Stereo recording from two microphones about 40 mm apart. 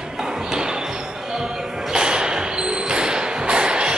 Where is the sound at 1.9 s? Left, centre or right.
Right.